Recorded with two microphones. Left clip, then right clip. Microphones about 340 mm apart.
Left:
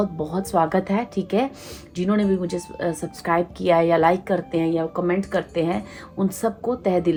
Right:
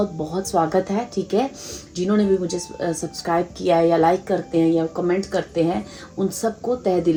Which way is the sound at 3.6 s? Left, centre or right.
Left.